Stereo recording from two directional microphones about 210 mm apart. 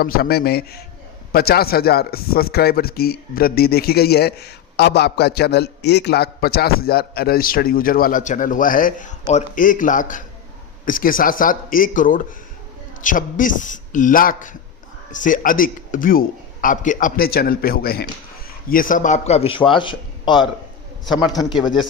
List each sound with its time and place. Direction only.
0.0 s a man's voice: 45° left (ahead or behind); by 21.6 s 20° left (ahead or behind)